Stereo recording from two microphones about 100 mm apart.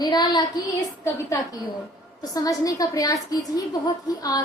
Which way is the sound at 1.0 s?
35° left (ahead or behind).